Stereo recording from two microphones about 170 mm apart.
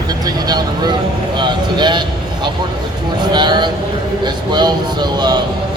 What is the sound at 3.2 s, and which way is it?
Speech, 25° right (ahead or behind).